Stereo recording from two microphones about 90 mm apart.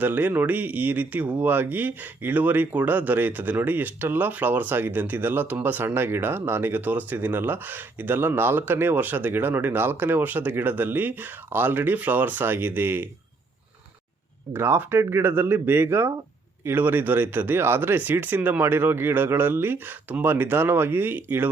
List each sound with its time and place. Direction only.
0.0 s speech: 20° right (ahead or behind)
14.5 s speech: 25° right (ahead or behind)